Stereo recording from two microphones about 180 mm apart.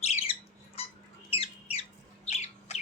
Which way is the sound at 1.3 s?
30° left (ahead or behind).